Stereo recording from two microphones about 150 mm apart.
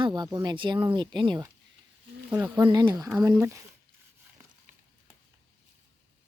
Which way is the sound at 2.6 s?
30° right (ahead or behind).